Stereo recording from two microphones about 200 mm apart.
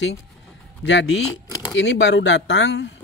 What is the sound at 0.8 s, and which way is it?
Speech, 65° left (ahead or behind).